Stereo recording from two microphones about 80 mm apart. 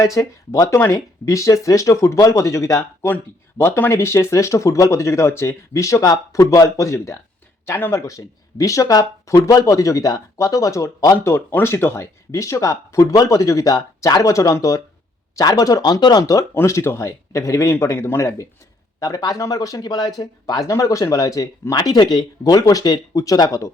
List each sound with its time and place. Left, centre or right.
0.0 s speech: left
3.6 s speech: left
11.2 s speech: left
16.2 s speech: left
16.6 s speech: left